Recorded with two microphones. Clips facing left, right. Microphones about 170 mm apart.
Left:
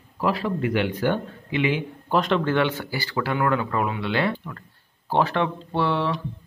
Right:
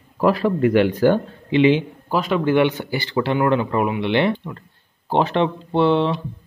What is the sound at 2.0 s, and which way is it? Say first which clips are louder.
Speech: right 2 dB; 5° right (ahead or behind).